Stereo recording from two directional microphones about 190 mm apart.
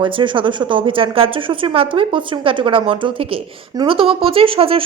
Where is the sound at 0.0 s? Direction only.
25° right (ahead or behind).